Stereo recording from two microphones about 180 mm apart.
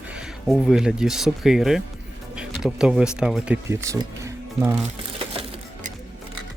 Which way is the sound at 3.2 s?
5° right (ahead or behind).